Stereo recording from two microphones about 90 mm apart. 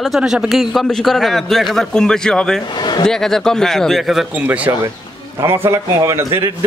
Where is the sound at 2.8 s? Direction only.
55° left (ahead or behind).